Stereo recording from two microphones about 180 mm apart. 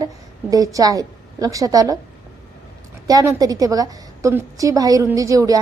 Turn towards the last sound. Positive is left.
turn(degrees=-20)  # may be behind; listen again after turning